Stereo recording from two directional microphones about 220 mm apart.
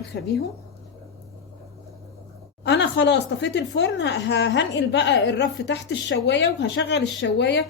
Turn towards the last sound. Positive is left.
turn(degrees=55)  # may be behind; listen again after turning